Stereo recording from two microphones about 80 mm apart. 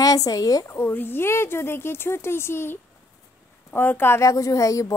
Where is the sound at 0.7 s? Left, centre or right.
Left.